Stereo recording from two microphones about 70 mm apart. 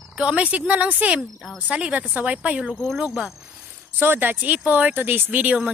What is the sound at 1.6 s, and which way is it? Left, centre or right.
Speech, centre.